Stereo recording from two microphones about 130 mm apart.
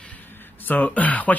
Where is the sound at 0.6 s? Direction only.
15° left (ahead or behind).